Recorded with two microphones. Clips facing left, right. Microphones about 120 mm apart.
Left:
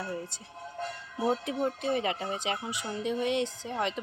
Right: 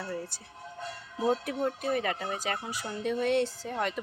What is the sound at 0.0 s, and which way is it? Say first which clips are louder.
Speech: even; 20° left (ahead or behind).